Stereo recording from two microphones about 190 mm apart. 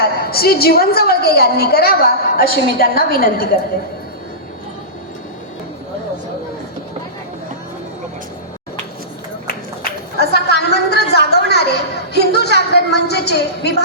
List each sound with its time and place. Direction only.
0.0 s a woman's voice: 55° left (ahead or behind)
10.2 s a sound: 60° left (ahead or behind)
12.1 s a woman's voice: 60° left (ahead or behind)